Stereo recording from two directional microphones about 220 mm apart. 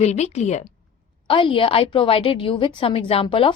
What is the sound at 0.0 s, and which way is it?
A woman's voice, 30° left (ahead or behind).